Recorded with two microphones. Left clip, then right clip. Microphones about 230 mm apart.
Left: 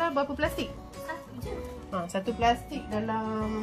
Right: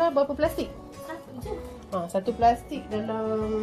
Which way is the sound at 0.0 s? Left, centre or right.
Left.